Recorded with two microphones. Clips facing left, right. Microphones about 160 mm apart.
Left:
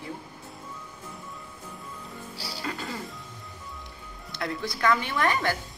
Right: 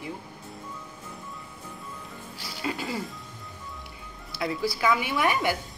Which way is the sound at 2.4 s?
35° left (ahead or behind).